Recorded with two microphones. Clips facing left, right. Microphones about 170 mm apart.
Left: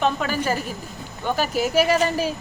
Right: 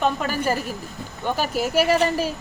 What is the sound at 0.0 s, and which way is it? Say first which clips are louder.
Speech: even; 5° right (ahead or behind).